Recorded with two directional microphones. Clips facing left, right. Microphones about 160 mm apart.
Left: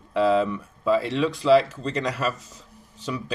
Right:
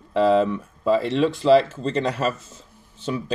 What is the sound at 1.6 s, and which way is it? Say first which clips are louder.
Speech: right 4 dB; 25° right (ahead or behind).